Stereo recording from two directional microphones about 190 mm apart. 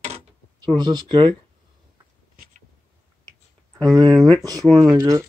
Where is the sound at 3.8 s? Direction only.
20° right (ahead or behind).